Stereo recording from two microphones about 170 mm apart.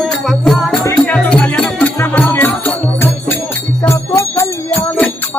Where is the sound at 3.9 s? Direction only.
15° left (ahead or behind).